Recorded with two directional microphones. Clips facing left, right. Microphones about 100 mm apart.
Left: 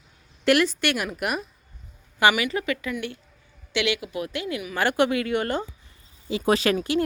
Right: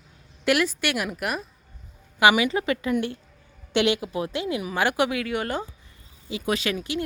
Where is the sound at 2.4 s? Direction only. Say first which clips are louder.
Right 2 dB; 25° right (ahead or behind).